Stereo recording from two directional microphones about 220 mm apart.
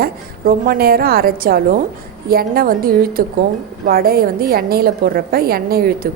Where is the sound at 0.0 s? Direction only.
40° right (ahead or behind).